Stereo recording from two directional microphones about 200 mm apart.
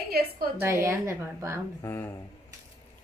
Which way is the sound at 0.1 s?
50° right (ahead or behind).